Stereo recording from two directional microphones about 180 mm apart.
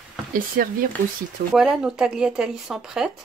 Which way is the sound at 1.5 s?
5° right (ahead or behind).